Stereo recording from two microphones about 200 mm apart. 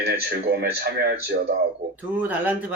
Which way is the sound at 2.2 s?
10° right (ahead or behind).